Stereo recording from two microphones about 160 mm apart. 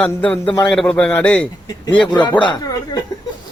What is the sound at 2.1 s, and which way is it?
Speech, 30° left (ahead or behind).